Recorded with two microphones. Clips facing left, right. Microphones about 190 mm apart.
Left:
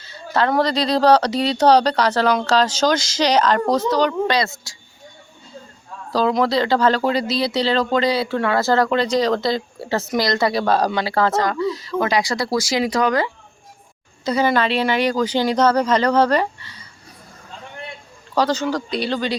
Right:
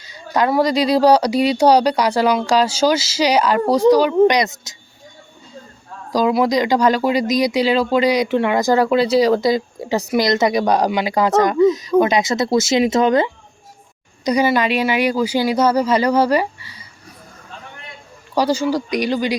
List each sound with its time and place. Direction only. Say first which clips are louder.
0.0 s speech: right 2 dB; 15° right (ahead or behind)
6.1 s speech: right 2 dB; 15° right (ahead or behind)
14.3 s speech: right 2 dB; 15° right (ahead or behind)
18.3 s speech: right 2 dB; 10° right (ahead or behind)